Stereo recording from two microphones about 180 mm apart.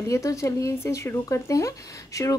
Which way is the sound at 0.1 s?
15° left (ahead or behind).